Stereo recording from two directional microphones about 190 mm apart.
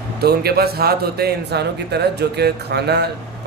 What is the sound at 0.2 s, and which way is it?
A man's voice, 55° right (ahead or behind).